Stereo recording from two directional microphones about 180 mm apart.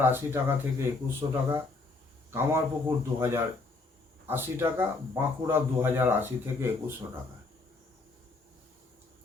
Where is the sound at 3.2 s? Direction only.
15° right (ahead or behind).